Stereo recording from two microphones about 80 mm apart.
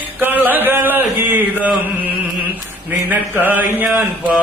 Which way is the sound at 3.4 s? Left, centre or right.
Right.